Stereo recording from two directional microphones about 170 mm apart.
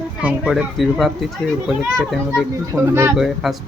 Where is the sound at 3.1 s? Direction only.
5° right (ahead or behind).